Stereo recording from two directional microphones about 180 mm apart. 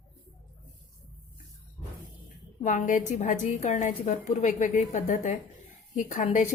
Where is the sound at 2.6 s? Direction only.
45° left (ahead or behind).